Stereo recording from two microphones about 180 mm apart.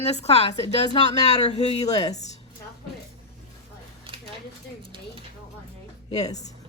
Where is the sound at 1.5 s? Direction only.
35° left (ahead or behind).